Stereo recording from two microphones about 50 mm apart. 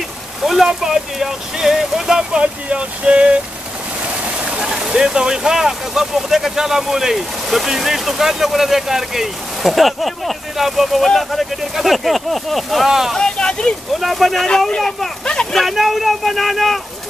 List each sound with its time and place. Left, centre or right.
0.4 s speech: centre
2.4 s a sound: right
4.2 s speech: centre
13.1 s speech: centre
13.9 s speech: centre
15.6 s speech: centre